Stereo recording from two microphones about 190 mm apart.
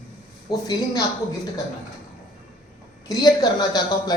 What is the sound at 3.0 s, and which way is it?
Speech, 20° left (ahead or behind).